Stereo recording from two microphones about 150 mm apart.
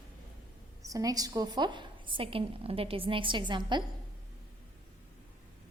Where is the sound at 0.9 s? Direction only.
25° right (ahead or behind).